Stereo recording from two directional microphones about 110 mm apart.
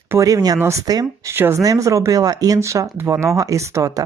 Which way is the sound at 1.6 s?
30° right (ahead or behind).